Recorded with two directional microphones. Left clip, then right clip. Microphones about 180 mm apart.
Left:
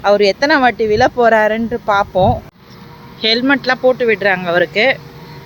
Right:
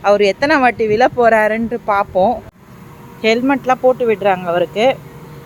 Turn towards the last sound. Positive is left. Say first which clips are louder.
# left 1 dB
turn(degrees=0)  # may be behind; listen again after turning